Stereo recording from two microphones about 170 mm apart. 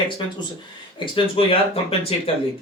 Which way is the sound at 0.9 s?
30° left (ahead or behind).